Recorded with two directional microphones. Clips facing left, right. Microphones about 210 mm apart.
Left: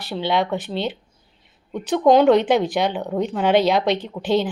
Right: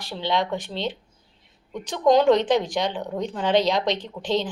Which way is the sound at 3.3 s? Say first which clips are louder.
Left 3 dB; 55° left (ahead or behind).